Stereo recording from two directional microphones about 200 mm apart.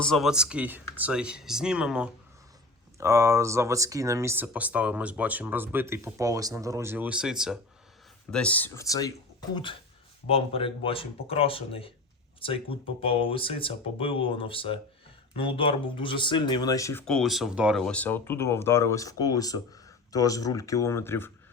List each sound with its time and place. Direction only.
0.0 s speech: centre (ahead or behind)
3.0 s speech: 15° right (ahead or behind); by 9.1 s 15° left (ahead or behind)
10.2 s speech: 30° left (ahead or behind)
17.1 s speech: centre (ahead or behind)